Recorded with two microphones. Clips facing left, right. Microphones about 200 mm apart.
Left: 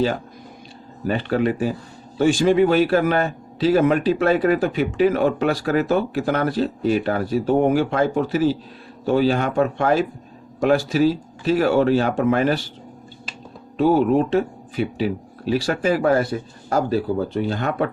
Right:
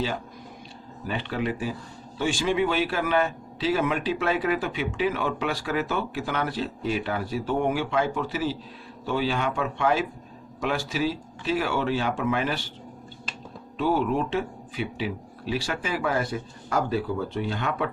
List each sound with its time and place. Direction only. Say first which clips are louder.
1.0 s a man's voice: left 8 dB; 45° left (ahead or behind)
13.7 s speech: left 8 dB; 45° left (ahead or behind)